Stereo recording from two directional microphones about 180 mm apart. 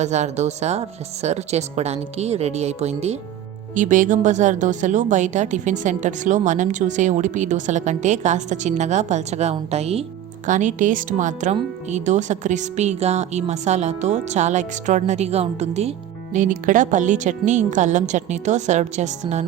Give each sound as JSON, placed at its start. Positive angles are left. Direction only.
{"t": 0.0, "sound": "speech", "side_deg": -40}